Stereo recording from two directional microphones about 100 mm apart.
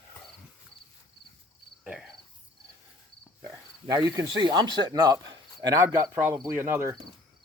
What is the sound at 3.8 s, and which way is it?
Speech, 35° right (ahead or behind).